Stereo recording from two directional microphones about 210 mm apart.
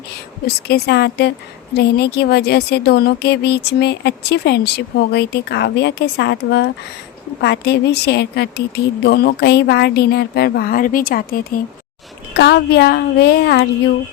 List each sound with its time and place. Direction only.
0.4 s speech: 50° left (ahead or behind)